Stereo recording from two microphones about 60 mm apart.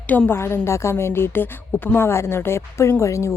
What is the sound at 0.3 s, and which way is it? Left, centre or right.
A woman's voice, left.